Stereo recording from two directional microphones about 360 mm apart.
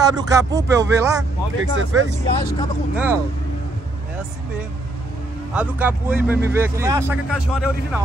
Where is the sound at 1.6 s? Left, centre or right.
Right.